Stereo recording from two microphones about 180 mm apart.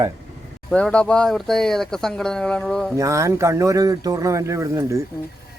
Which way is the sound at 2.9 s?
15° right (ahead or behind).